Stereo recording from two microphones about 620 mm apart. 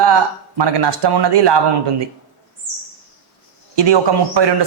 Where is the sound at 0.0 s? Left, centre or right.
Right.